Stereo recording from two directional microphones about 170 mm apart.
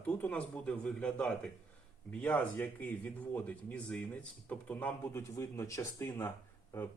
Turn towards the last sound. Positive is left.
turn(degrees=15)  # may be behind; listen again after turning